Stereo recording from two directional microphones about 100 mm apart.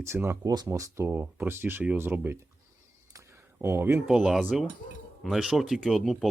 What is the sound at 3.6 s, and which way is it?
Speech, 25° right (ahead or behind).